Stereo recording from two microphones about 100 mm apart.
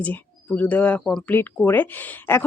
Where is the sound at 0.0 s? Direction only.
15° left (ahead or behind).